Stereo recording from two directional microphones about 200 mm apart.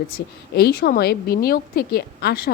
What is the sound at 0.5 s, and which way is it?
A woman's voice, 50° left (ahead or behind).